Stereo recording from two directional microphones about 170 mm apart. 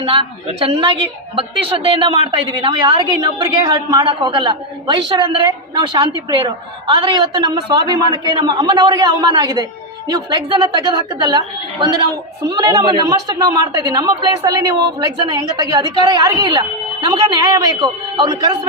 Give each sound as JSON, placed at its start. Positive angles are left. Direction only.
{"t": 0.0, "sound": "a woman's voice", "side_deg": -30}